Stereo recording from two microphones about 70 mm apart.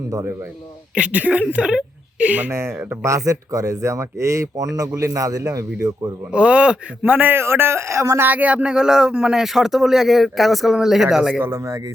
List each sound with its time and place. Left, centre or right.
0.9 s speech: centre
2.5 s speech: right
6.3 s speech: centre
7.0 s speech: right
8.2 s speech: right; by 11.3 s centre
11.3 s speech: right